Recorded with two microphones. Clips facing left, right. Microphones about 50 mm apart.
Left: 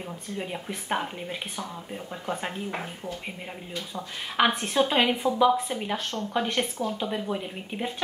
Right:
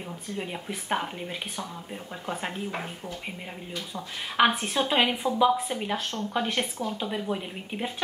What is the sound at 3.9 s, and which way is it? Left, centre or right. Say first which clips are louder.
A woman's voice: right 1 dB; centre.